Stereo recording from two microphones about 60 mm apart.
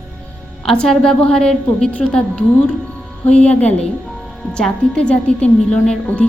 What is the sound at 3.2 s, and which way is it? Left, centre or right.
A woman's voice, left.